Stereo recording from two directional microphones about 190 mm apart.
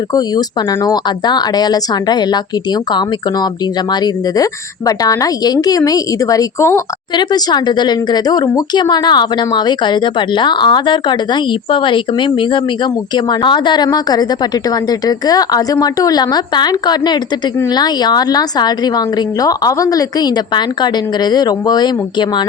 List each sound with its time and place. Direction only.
0.1 s a woman's voice: 20° left (ahead or behind)
4.9 s a woman's voice: 20° left (ahead or behind)